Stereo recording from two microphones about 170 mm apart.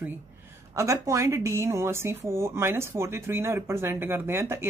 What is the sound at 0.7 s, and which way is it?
Speech, 15° right (ahead or behind).